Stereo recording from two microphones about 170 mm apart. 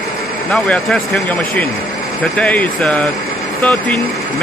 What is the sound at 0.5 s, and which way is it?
Speech, 5° left (ahead or behind).